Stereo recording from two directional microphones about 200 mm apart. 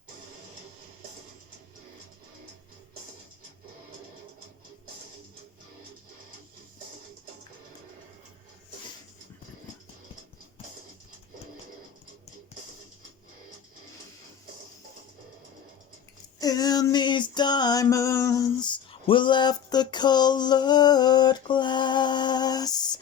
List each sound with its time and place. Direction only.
16.4 s music: 20° left (ahead or behind)